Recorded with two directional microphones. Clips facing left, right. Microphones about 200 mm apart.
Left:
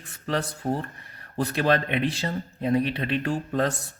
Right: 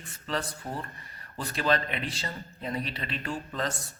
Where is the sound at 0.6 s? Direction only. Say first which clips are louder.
Left 9 dB; 40° left (ahead or behind).